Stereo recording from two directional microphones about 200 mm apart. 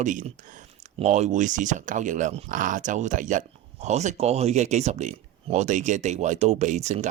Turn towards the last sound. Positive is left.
turn(degrees=-35)  # may be behind; listen again after turning